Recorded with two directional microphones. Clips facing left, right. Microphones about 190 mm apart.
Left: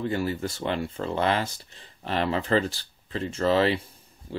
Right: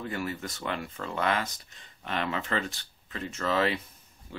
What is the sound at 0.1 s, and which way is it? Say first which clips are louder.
Speech: left 6 dB; 30° left (ahead or behind).